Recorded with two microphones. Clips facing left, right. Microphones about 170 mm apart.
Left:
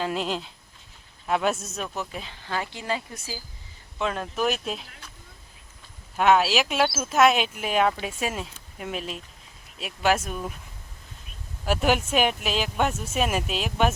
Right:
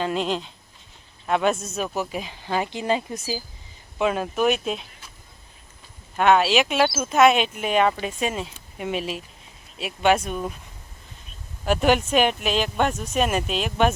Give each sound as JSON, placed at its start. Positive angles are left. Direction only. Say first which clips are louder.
{"t": 0.0, "sound": "speech", "louder": "right 3 dB", "side_deg": 5}
{"t": 2.0, "sound": "speech", "louder": "right 6 dB", "side_deg": -15}
{"t": 3.9, "sound": "speech", "louder": "right 5 dB", "side_deg": -10}
{"t": 6.1, "sound": "speech", "louder": "right 2 dB", "side_deg": 5}
{"t": 11.6, "sound": "speech", "louder": "right 3 dB", "side_deg": 5}